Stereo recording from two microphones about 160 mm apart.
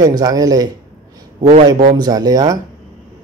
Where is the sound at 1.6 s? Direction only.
25° right (ahead or behind).